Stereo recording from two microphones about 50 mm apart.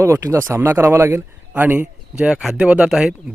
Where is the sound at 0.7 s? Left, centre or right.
Right.